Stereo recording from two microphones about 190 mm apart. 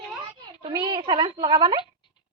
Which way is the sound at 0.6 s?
25° right (ahead or behind).